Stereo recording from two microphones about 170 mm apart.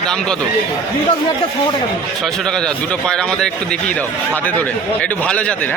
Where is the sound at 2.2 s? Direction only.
5° left (ahead or behind).